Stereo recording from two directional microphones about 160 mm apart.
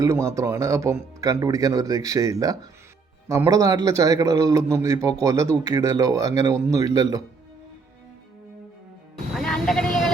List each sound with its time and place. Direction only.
0.0 s a man's voice: 20° right (ahead or behind)
9.3 s vehicle: centre (ahead or behind)